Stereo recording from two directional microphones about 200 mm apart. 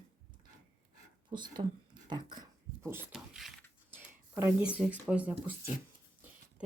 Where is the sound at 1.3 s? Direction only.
25° right (ahead or behind).